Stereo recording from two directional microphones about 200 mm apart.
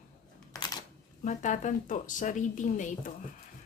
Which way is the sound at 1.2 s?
40° left (ahead or behind).